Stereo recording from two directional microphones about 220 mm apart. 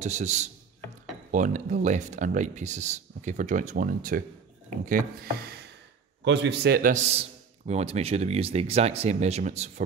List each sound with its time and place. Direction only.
0.0 s speech: 30° right (ahead or behind)
6.2 s a man's voice: 50° right (ahead or behind); by 9.8 s 30° right (ahead or behind)